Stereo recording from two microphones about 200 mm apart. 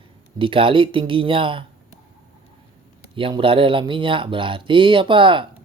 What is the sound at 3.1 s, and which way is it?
Speech, 25° right (ahead or behind).